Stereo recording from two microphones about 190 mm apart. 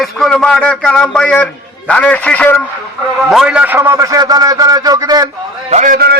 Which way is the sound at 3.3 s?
5° right (ahead or behind).